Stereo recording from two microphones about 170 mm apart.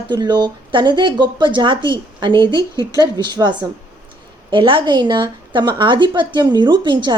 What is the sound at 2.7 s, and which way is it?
Speech, 20° left (ahead or behind).